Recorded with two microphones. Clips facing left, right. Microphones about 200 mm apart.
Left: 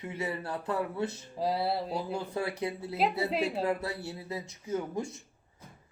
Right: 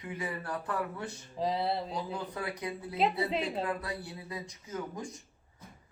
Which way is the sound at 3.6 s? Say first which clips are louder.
Left 4 dB; 25° left (ahead or behind).